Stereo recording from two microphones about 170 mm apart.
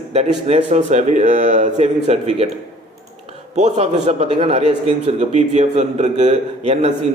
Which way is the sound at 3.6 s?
40° right (ahead or behind).